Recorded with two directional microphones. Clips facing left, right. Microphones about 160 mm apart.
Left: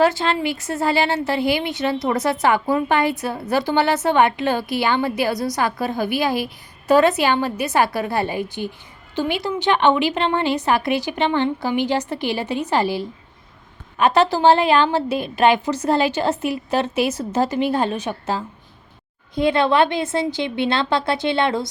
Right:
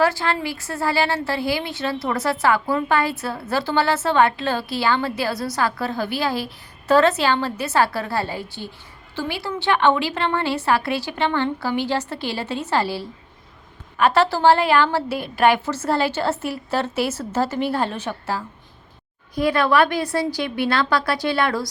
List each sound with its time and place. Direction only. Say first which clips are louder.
0.0 s a woman's voice: left 3 dB; 20° left (ahead or behind)